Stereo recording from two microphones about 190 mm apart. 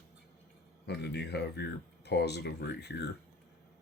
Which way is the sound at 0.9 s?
60° left (ahead or behind).